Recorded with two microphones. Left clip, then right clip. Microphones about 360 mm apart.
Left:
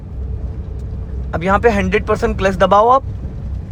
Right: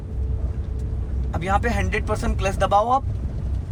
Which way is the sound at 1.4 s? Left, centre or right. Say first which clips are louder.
Left 9 dB; centre.